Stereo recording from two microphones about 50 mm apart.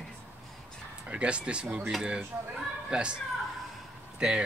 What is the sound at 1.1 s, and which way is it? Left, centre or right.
Speech, right.